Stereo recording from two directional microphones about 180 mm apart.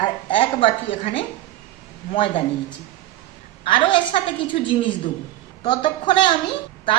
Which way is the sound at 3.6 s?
25° left (ahead or behind).